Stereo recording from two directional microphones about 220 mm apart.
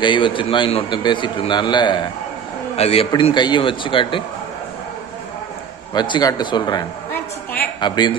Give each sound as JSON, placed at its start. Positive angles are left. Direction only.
{"t": 0.0, "sound": "a man's voice", "side_deg": 20}
{"t": 5.9, "sound": "a man's voice", "side_deg": 20}